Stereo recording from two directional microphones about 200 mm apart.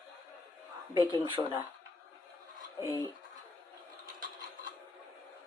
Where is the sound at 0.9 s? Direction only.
20° right (ahead or behind).